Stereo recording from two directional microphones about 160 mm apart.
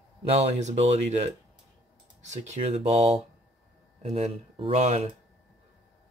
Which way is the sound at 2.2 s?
45° right (ahead or behind).